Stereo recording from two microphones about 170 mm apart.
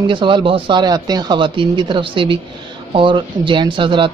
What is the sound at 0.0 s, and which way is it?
Speech, 30° right (ahead or behind).